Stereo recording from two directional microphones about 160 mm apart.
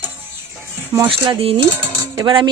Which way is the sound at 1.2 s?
35° right (ahead or behind).